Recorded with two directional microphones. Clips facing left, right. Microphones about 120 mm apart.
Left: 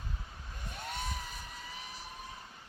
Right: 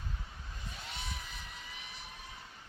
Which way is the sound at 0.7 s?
50° left (ahead or behind).